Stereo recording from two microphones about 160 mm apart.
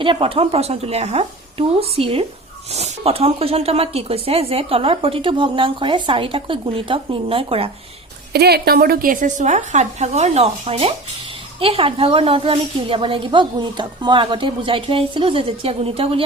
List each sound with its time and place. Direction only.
0.0 s speech: 35° right (ahead or behind)
8.3 s speech: 85° right; by 16.2 s 35° right (ahead or behind)